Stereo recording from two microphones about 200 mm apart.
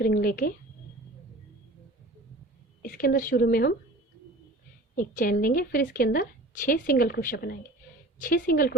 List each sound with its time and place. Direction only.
0.0 s a woman's voice: 45° left (ahead or behind)
2.8 s a woman's voice: 45° left (ahead or behind)
4.9 s a woman's voice: 45° left (ahead or behind)